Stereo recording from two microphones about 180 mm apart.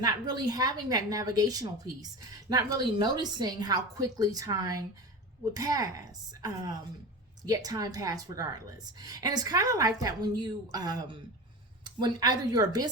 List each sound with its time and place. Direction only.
0.0 s a woman's voice: 20° right (ahead or behind)
7.4 s a woman's voice: 20° right (ahead or behind)